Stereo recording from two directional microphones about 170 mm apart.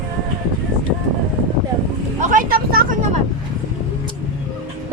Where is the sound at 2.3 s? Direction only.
55° right (ahead or behind).